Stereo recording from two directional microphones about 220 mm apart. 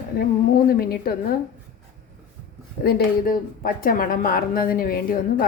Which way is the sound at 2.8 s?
40° left (ahead or behind).